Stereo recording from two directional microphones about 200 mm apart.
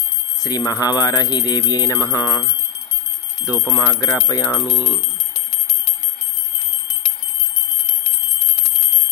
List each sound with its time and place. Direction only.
0.4 s speech: 20° left (ahead or behind)
3.5 s speech: 15° left (ahead or behind)